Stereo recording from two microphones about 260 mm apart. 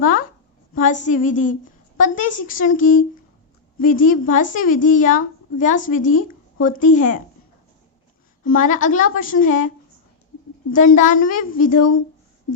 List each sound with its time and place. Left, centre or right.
0.0 s a woman's voice: left
8.4 s a woman's voice: left